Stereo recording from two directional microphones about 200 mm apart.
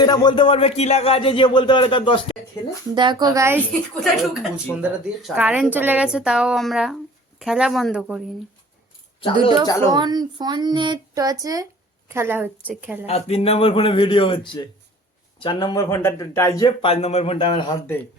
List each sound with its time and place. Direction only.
0.0 s speech: 20° left (ahead or behind)
2.9 s speech: 20° right (ahead or behind)
4.0 s a woman's voice: centre (ahead or behind)
9.9 s speech: 20° right (ahead or behind)
13.1 s speech: 30° left (ahead or behind); by 16.6 s 15° left (ahead or behind)
16.6 s speech: 30° left (ahead or behind)